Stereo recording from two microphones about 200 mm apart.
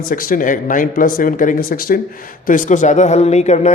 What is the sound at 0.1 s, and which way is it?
Speech, 45° left (ahead or behind).